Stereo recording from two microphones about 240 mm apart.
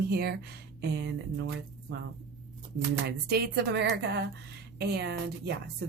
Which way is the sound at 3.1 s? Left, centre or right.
Right.